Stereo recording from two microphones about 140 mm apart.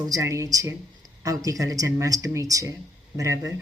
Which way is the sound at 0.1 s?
20° right (ahead or behind).